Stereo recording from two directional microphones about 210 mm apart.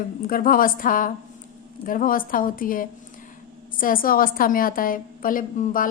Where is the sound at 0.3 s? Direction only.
40° left (ahead or behind).